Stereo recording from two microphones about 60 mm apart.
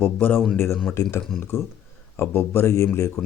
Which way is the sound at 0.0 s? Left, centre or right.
Left.